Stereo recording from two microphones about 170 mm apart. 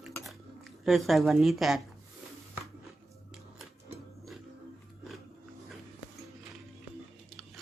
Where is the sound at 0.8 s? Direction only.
Centre (ahead or behind).